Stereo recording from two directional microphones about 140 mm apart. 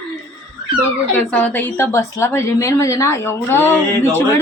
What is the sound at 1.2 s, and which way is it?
A woman's voice, 10° left (ahead or behind).